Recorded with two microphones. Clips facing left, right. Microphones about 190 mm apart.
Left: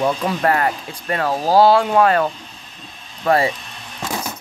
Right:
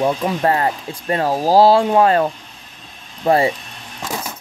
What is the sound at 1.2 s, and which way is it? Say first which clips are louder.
Speech: right 1 dB; 10° right (ahead or behind).